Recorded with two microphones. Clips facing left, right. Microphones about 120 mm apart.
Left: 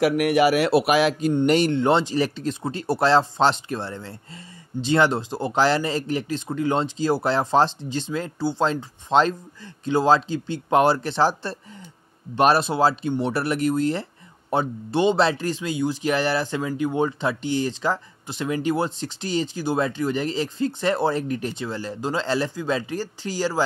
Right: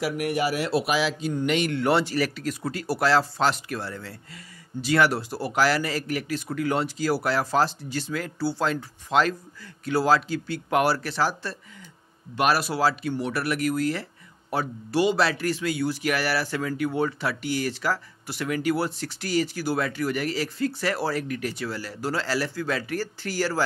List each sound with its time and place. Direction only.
0.0 s a man's voice: 80° left; by 1.3 s 55° left (ahead or behind)
1.3 s speech: 35° left (ahead or behind)
1.8 s speech: 20° left (ahead or behind)